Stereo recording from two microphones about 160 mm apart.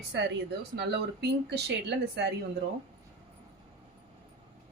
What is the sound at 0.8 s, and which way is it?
Speech, 90° right.